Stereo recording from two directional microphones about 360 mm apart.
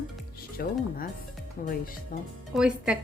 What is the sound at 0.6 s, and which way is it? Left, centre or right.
Speech, left.